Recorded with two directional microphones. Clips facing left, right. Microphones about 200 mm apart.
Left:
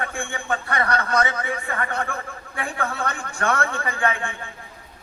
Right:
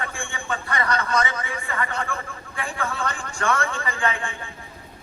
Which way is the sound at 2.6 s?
60° left (ahead or behind).